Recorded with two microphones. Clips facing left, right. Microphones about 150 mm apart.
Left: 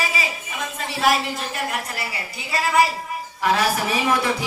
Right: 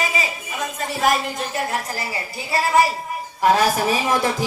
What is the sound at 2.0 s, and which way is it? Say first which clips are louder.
Speech: right 3 dB; 35° right (ahead or behind).